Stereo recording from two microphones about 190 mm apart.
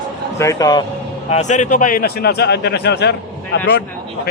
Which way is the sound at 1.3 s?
40° left (ahead or behind).